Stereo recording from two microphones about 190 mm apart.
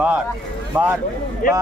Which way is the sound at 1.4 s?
45° left (ahead or behind).